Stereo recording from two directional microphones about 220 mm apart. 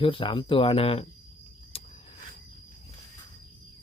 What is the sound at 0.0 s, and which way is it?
Speech, 25° left (ahead or behind).